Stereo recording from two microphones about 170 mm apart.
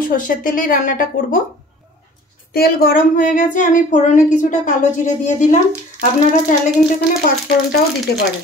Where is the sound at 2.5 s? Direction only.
65° left (ahead or behind); by 5.6 s 45° left (ahead or behind).